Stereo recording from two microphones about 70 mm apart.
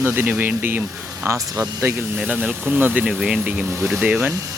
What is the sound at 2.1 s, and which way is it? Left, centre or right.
Speech, centre.